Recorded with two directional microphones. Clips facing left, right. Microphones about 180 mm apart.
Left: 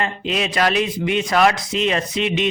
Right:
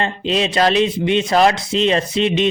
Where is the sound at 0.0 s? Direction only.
30° right (ahead or behind).